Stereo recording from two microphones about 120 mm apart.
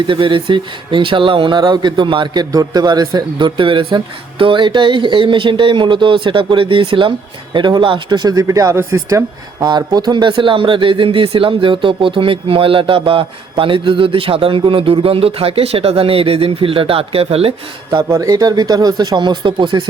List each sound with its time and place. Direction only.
0.1 s speech: 45° right (ahead or behind)
18.1 s speech: 25° right (ahead or behind)